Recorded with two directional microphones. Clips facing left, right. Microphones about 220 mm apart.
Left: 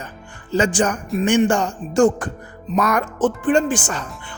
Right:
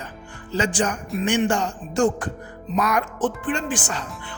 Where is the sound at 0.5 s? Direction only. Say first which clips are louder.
Left 4 dB; 50° left (ahead or behind).